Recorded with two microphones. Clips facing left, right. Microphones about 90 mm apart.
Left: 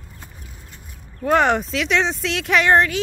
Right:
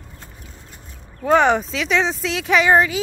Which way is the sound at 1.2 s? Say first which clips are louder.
Right 2 dB; centre (ahead or behind).